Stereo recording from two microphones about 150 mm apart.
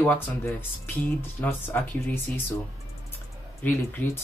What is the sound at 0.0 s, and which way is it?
Speech, 15° left (ahead or behind).